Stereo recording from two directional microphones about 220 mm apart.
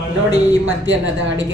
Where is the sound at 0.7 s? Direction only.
60° right (ahead or behind).